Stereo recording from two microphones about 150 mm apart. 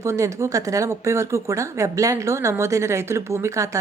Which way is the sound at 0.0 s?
20° right (ahead or behind).